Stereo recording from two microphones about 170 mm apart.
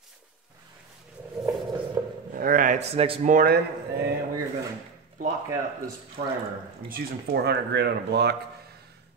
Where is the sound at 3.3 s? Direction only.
65° right (ahead or behind).